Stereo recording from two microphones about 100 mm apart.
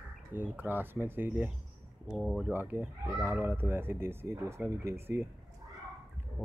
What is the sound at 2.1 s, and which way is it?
Speech, 5° right (ahead or behind).